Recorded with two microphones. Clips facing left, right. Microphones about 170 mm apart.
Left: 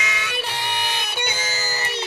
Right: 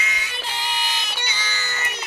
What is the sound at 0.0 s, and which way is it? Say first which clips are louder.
Music: left 4 dB; 85° left.